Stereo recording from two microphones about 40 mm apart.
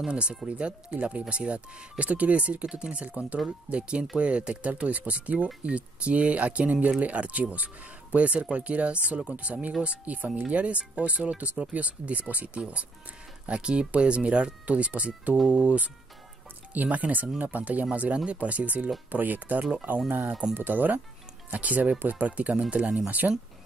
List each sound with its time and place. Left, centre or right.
0.1 s speech: right
10.1 s speech: right
10.5 s speech: right
20.5 s speech: right
22.4 s speech: right
23.0 s speech: right